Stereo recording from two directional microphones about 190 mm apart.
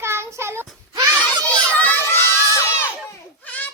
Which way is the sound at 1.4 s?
5° left (ahead or behind).